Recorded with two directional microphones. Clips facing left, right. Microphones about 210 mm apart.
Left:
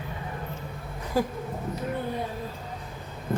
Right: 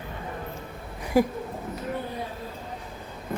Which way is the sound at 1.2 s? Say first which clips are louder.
Right 5 dB; 15° right (ahead or behind).